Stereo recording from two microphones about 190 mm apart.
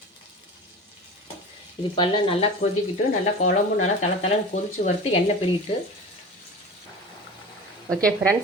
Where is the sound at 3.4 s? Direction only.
40° left (ahead or behind).